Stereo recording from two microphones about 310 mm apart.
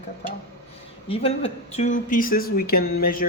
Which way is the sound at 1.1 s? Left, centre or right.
Centre.